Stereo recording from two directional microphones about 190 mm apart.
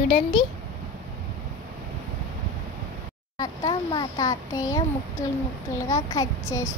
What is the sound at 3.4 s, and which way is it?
A child's voice, 20° left (ahead or behind).